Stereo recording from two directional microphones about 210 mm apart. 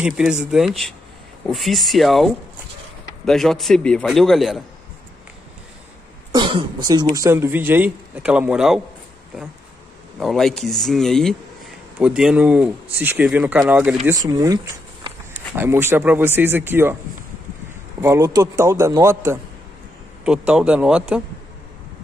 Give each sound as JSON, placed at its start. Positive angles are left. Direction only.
{"t": 0.0, "sound": "a man's voice", "side_deg": -5}
{"t": 6.3, "sound": "speech", "side_deg": -25}
{"t": 10.1, "sound": "a man's voice", "side_deg": 0}
{"t": 14.1, "sound": "speech", "side_deg": -15}
{"t": 18.0, "sound": "a man's voice", "side_deg": -15}